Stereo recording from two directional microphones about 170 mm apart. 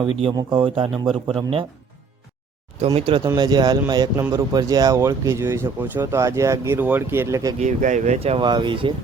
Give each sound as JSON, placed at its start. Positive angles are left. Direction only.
{"t": 0.0, "sound": "speech", "side_deg": -30}
{"t": 2.8, "sound": "speech", "side_deg": -35}
{"t": 3.2, "sound": "speech", "side_deg": -25}
{"t": 7.6, "sound": "speech", "side_deg": -45}